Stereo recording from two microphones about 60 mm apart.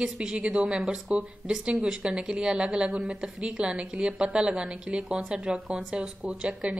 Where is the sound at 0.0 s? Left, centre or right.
Centre.